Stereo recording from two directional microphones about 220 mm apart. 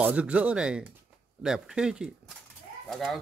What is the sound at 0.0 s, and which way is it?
Speech, 5° right (ahead or behind).